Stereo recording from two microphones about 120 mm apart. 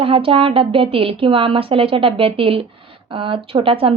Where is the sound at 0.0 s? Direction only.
50° right (ahead or behind).